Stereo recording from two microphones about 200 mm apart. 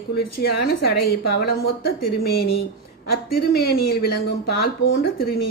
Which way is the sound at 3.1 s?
50° left (ahead or behind).